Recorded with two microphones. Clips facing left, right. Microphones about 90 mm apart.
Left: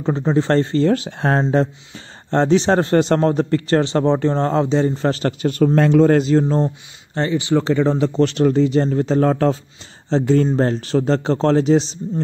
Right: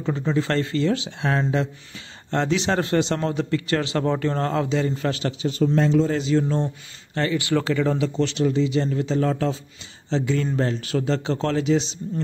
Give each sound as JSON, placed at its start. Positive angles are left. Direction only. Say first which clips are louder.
{"t": 0.0, "sound": "speech", "louder": "left 5 dB", "side_deg": 35}
{"t": 5.4, "sound": "speech", "louder": "left 5 dB", "side_deg": 55}
{"t": 6.4, "sound": "speech", "louder": "left 6 dB", "side_deg": 35}
{"t": 7.2, "sound": "speech", "louder": "left 4 dB", "side_deg": 25}
{"t": 8.0, "sound": "speech", "louder": "left 6 dB", "side_deg": 45}